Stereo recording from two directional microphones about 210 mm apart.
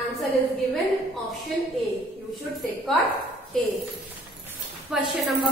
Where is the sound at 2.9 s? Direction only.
Centre (ahead or behind).